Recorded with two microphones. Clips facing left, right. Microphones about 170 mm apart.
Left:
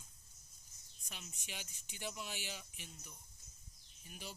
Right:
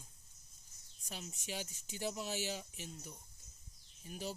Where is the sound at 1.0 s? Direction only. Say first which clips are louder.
Right 7 dB; 35° right (ahead or behind).